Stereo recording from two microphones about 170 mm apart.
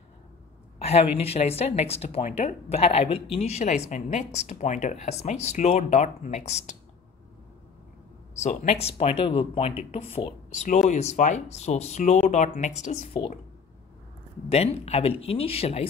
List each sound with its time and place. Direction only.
0.7 s speech: 35° left (ahead or behind)
8.4 s speech: 40° left (ahead or behind)
14.5 s speech: 35° left (ahead or behind)